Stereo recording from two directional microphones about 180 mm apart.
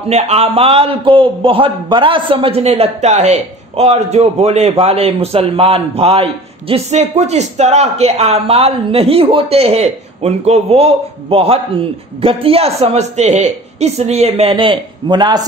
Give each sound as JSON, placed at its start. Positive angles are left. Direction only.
{"t": 0.1, "sound": "speech", "side_deg": -35}